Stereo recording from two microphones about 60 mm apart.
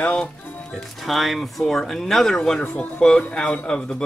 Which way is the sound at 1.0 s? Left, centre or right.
Centre.